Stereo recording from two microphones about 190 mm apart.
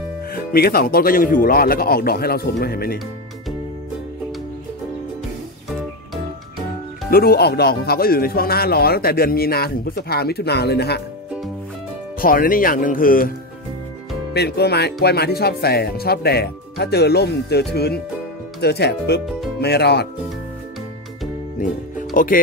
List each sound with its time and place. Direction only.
0.3 s speech: 50° left (ahead or behind)
7.1 s speech: 55° left (ahead or behind)
12.2 s speech: 50° left (ahead or behind)
14.3 s speech: 60° left (ahead or behind)
21.5 s music: 45° left (ahead or behind)